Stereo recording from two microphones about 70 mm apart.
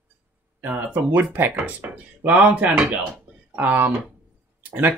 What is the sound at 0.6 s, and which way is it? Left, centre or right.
Speech, right.